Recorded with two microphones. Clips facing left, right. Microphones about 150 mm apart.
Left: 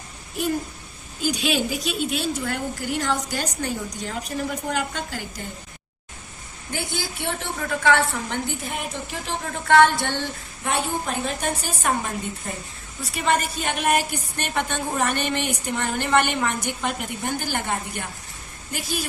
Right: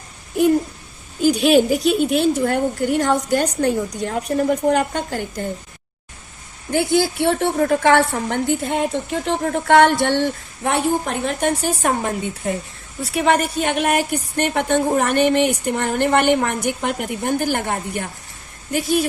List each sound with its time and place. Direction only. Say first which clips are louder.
1.2 s a woman's voice: right 10 dB; 55° right (ahead or behind)
6.9 s a woman's voice: right 14 dB; 65° right (ahead or behind)